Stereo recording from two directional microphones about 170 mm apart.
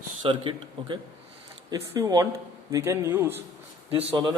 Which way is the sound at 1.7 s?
20° right (ahead or behind).